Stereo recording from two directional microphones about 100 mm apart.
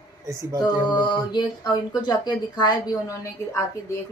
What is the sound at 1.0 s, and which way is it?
Speech, 50° left (ahead or behind).